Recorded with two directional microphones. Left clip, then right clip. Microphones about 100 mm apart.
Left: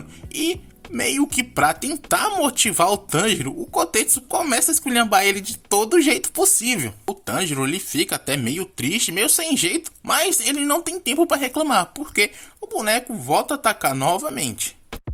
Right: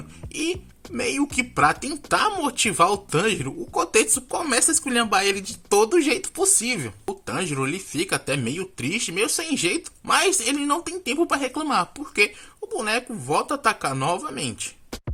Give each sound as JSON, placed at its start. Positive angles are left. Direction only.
{"t": 0.3, "sound": "speech", "side_deg": 35}
{"t": 0.9, "sound": "speech", "side_deg": 45}
{"t": 7.1, "sound": "speech", "side_deg": 40}